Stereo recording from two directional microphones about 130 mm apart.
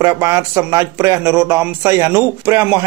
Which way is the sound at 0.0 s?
20° right (ahead or behind).